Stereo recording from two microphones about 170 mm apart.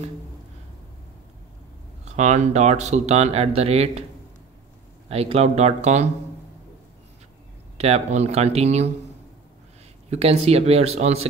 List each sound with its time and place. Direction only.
2.0 s speech: 45° right (ahead or behind)
5.0 s speech: 35° right (ahead or behind)
7.7 s speech: 40° right (ahead or behind)
10.0 s speech: 35° right (ahead or behind)